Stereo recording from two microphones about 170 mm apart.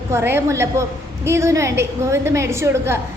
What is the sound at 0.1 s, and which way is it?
A woman's voice, 15° right (ahead or behind).